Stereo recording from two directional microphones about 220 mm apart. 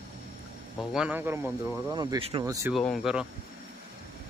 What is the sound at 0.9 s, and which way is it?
Speech, 5° right (ahead or behind).